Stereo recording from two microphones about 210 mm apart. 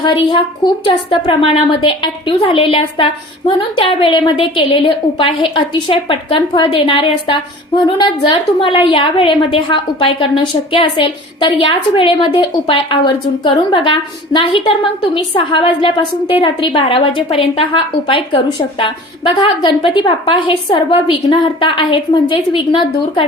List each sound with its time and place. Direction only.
0.0 s a woman's voice: 20° left (ahead or behind)